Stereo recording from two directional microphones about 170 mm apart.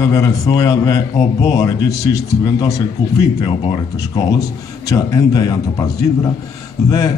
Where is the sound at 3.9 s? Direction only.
20° left (ahead or behind).